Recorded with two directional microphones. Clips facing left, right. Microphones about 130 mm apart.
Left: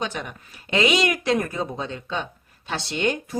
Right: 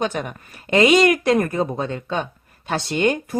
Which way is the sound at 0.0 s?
50° right (ahead or behind).